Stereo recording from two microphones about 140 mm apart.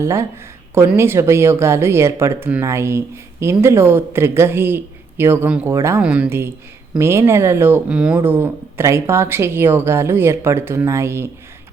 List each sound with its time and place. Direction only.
0.0 s speech: 20° right (ahead or behind)
6.0 s speech: 10° right (ahead or behind)